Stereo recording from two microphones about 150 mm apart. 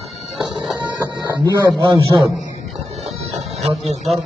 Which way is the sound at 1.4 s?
25° right (ahead or behind).